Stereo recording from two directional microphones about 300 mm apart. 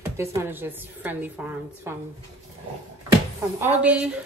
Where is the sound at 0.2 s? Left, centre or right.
Centre.